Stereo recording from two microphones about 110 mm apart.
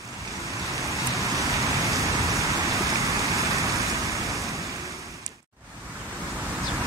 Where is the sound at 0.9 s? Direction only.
30° right (ahead or behind).